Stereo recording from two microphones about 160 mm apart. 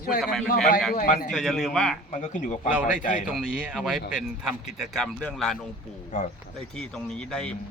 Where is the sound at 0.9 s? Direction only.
55° left (ahead or behind).